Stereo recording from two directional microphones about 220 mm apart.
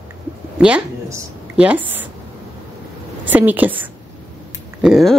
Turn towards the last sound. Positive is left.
turn(degrees=0)  # may be behind; listen again after turning